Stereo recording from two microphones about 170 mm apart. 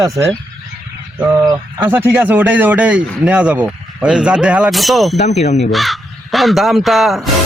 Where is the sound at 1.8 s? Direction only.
10° right (ahead or behind).